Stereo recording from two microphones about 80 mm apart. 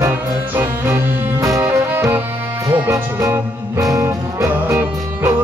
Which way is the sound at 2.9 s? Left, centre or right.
Right.